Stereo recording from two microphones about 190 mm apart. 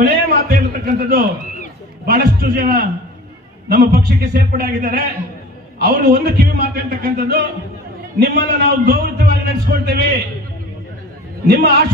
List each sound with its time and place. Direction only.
0.0 s a man's voice: 50° right (ahead or behind)
11.4 s a man's voice: 55° right (ahead or behind)